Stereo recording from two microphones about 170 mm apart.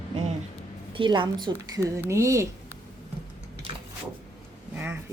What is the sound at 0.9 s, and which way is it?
Speech, 30° right (ahead or behind).